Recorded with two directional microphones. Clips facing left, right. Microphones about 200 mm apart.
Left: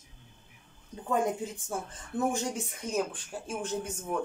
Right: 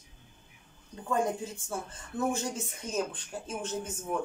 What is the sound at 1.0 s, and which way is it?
Speech, 15° left (ahead or behind).